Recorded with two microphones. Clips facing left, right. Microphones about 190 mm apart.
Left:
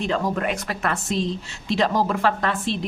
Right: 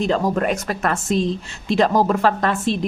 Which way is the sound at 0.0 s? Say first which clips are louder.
Right 4 dB; 40° right (ahead or behind).